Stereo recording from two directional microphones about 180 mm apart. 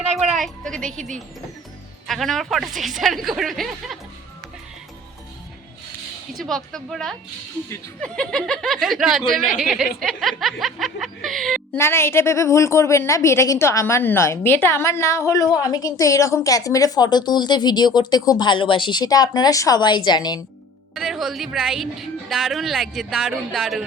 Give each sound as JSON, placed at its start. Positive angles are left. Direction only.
{"t": 0.3, "sound": "a woman's voice", "side_deg": 0}
{"t": 0.9, "sound": "speech", "side_deg": -45}
{"t": 2.0, "sound": "a woman's voice", "side_deg": 0}
{"t": 6.3, "sound": "a woman's voice", "side_deg": 0}
{"t": 11.8, "sound": "a woman's voice", "side_deg": 15}
{"t": 20.9, "sound": "a woman's voice", "side_deg": 0}